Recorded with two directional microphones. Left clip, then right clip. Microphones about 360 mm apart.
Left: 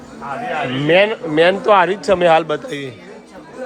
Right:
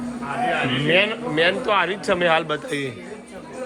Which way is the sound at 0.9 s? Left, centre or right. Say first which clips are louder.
Left 7 dB; left.